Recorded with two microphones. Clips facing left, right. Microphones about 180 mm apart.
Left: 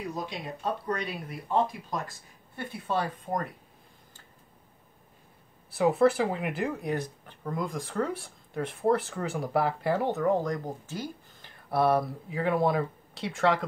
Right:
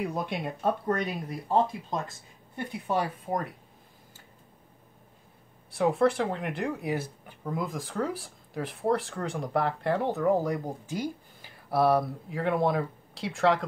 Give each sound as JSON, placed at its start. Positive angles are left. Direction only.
{"t": 0.0, "sound": "speech", "side_deg": -55}
{"t": 1.7, "sound": "speech", "side_deg": -25}
{"t": 5.7, "sound": "speech", "side_deg": 0}